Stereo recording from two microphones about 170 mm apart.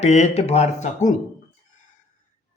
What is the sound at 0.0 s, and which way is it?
Speech, 40° left (ahead or behind).